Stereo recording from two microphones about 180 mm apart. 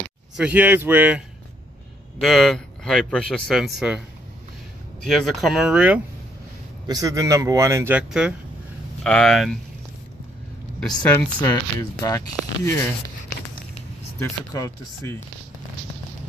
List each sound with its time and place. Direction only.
0.4 s a man's voice: 10° right (ahead or behind)
2.1 s a man's voice: centre (ahead or behind)
5.0 s a man's voice: centre (ahead or behind)
6.9 s a man's voice: 20° right (ahead or behind)
9.0 s a man's voice: 5° left (ahead or behind)
10.9 s speech: 20° left (ahead or behind)
12.4 s a man's voice: centre (ahead or behind)
14.2 s speech: 15° left (ahead or behind)